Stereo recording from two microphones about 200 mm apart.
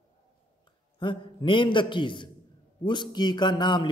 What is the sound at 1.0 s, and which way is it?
A man's voice, 25° left (ahead or behind).